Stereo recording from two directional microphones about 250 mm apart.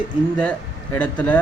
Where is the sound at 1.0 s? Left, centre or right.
Centre.